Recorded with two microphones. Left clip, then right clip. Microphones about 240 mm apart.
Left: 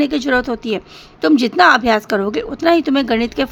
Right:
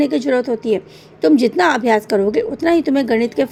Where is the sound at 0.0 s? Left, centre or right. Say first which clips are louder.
Even; centre.